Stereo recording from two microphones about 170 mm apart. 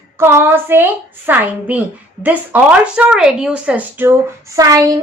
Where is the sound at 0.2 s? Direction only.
15° right (ahead or behind).